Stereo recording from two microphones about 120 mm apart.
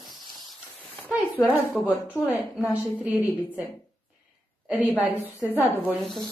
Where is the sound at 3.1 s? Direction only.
20° left (ahead or behind).